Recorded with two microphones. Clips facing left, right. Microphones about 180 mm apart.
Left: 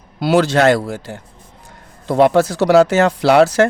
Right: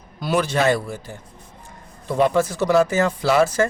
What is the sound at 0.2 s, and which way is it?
Speech, 80° left.